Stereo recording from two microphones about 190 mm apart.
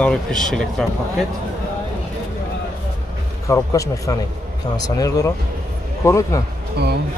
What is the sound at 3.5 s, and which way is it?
Speech, 15° left (ahead or behind).